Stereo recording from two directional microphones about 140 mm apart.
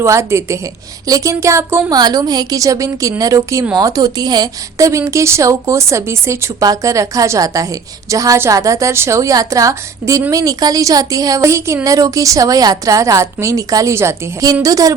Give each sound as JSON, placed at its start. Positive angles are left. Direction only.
{"t": 0.0, "sound": "a woman's voice", "side_deg": -20}